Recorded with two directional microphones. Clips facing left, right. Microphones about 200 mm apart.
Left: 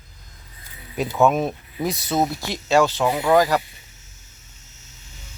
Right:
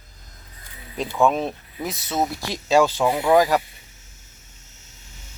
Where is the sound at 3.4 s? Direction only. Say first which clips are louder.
Even; 20° right (ahead or behind).